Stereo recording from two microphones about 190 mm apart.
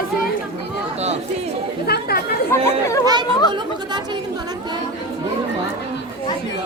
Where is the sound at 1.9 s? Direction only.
55° left (ahead or behind).